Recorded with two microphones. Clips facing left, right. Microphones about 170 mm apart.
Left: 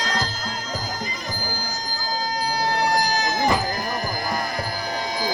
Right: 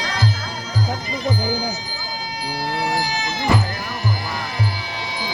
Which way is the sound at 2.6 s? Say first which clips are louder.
Left 1 dB; 45° left (ahead or behind).